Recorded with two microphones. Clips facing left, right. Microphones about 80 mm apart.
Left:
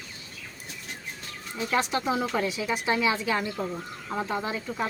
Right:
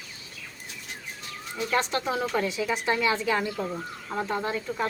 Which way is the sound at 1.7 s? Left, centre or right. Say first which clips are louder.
Left 1 dB; centre.